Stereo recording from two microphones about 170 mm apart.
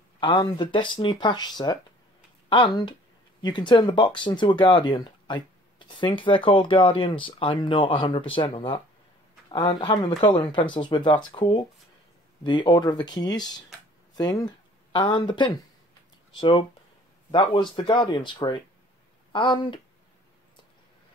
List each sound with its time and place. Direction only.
0.2 s speech: 30° left (ahead or behind)